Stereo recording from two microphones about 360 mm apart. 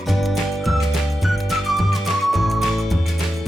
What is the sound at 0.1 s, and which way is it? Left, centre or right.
Music, centre.